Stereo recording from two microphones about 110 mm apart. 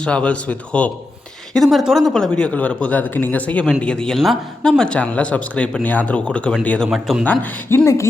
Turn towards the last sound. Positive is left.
turn(degrees=15)  # may be behind; listen again after turning